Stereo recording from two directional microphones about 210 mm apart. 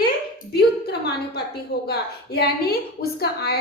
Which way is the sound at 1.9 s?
50° left (ahead or behind).